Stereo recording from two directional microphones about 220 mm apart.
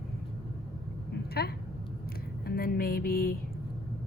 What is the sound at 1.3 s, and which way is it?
Speech, 45° left (ahead or behind).